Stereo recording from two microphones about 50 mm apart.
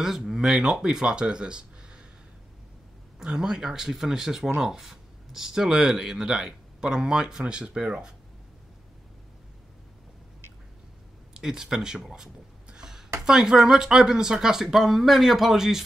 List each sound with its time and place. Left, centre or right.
0.0 s speech: centre
3.2 s speech: centre
11.3 s speech: centre
12.6 s a sound: centre
13.2 s speech: centre